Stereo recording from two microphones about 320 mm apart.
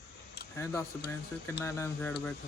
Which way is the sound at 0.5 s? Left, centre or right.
Centre.